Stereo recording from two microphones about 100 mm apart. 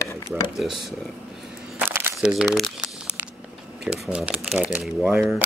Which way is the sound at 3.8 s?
5° right (ahead or behind).